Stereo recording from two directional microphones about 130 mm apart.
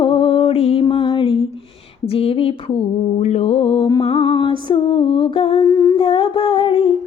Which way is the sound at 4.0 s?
45° left (ahead or behind).